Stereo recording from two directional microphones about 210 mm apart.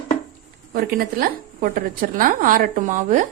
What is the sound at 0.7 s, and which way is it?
A woman's voice, 45° right (ahead or behind).